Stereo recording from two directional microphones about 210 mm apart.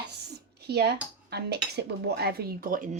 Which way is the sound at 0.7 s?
50° right (ahead or behind).